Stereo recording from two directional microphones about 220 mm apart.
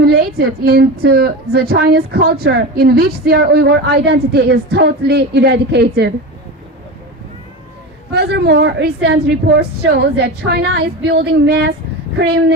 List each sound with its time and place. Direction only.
0.0 s a woman's voice: 45° right (ahead or behind)
8.1 s a woman's voice: 45° right (ahead or behind)